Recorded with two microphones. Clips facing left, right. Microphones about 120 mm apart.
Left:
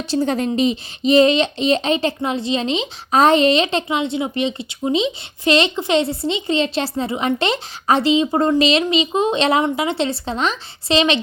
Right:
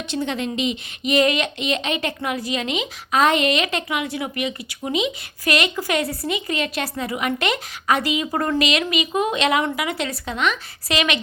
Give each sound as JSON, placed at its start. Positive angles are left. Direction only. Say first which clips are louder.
{"t": 0.1, "sound": "speech", "louder": "left 6 dB", "side_deg": 40}